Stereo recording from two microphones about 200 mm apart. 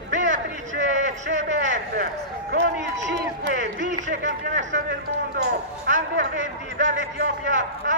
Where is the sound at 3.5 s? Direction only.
35° right (ahead or behind).